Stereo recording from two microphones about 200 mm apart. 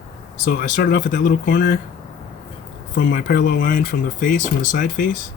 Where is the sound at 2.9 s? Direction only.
50° left (ahead or behind).